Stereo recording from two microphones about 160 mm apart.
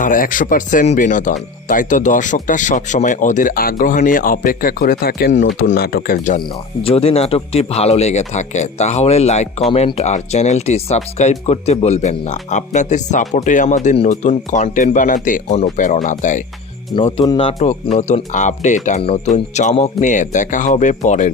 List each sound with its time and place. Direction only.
0.0 s speech: 60° left (ahead or behind)
6.8 s speech: 40° left (ahead or behind)
16.9 s speech: 35° left (ahead or behind)
17.7 s speech: 45° left (ahead or behind)